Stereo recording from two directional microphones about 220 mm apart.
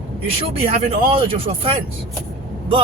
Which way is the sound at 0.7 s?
25° right (ahead or behind).